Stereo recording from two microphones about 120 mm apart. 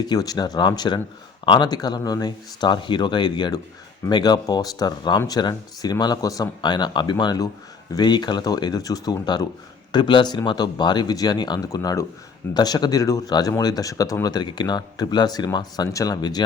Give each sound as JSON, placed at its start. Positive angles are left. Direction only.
{"t": 0.0, "sound": "speech", "side_deg": 35}